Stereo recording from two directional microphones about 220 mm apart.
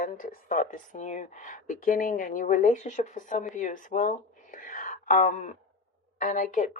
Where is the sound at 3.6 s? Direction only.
35° left (ahead or behind).